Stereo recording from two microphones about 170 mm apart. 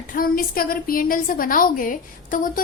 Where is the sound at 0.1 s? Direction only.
55° left (ahead or behind).